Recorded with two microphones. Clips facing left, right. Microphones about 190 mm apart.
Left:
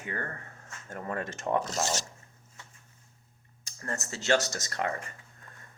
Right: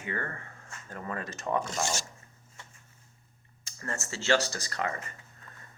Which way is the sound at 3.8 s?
40° left (ahead or behind).